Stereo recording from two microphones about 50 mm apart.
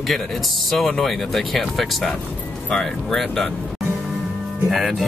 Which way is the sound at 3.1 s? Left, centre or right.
Centre.